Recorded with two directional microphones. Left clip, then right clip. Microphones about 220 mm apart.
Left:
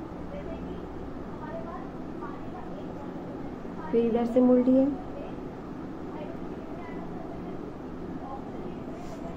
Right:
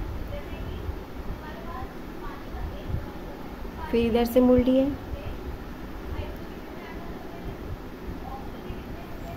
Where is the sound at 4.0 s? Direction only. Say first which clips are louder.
Right 2 dB; 40° right (ahead or behind).